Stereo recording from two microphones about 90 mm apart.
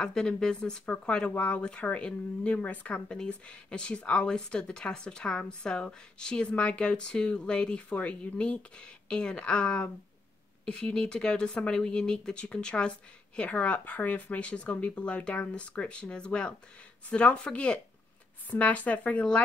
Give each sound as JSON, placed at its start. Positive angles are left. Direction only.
{"t": 0.0, "sound": "speech", "side_deg": 10}